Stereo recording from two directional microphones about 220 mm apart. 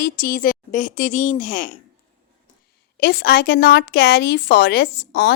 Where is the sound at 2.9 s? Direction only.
45° left (ahead or behind).